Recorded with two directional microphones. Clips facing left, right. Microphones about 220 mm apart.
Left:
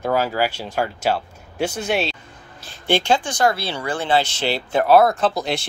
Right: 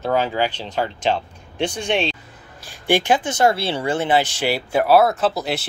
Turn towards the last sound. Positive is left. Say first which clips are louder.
# even
turn(degrees=-5)  # may be behind; listen again after turning